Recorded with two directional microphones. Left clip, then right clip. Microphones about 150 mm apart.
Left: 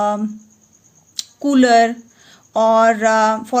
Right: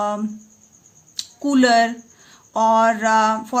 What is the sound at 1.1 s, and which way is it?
A woman's voice, 30° left (ahead or behind).